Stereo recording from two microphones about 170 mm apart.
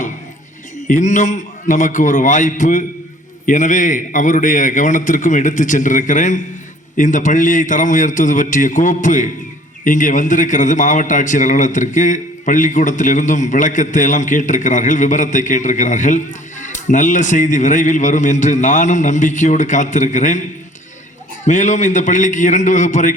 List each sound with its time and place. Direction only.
0.9 s a man's voice: 50° left (ahead or behind)
21.4 s a man's voice: 45° left (ahead or behind)